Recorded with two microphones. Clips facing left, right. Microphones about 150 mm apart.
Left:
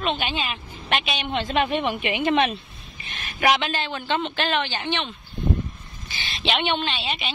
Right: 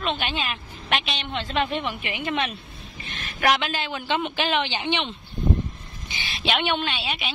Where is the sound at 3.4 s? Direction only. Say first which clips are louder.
Left 1 dB; centre (ahead or behind); by 6.3 s 20° right (ahead or behind).